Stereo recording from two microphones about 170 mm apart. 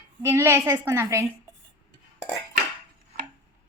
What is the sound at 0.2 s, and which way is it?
A woman's voice, 15° right (ahead or behind).